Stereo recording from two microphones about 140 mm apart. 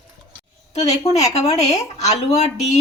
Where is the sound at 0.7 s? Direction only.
55° left (ahead or behind).